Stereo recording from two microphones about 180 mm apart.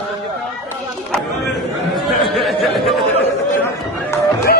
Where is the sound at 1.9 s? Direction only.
Centre (ahead or behind).